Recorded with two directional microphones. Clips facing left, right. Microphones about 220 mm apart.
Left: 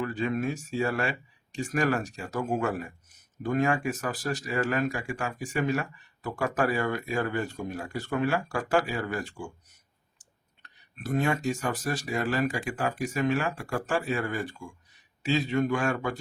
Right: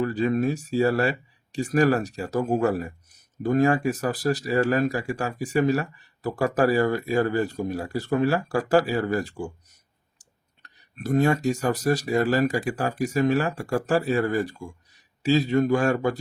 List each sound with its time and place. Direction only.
0.0 s speech: 35° right (ahead or behind)